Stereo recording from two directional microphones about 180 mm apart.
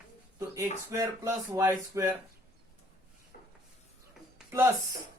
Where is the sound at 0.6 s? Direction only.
15° right (ahead or behind).